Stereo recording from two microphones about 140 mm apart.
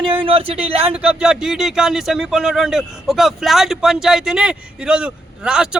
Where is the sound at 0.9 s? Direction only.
5° right (ahead or behind).